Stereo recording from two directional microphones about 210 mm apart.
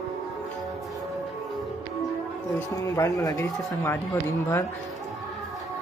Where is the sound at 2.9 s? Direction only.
15° left (ahead or behind).